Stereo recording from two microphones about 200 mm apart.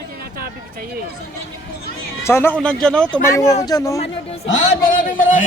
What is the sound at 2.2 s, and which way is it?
Speech, 10° left (ahead or behind).